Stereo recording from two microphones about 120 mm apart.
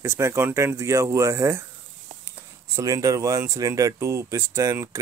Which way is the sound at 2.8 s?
30° right (ahead or behind).